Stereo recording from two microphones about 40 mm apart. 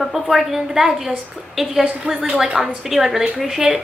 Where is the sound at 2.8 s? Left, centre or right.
Centre.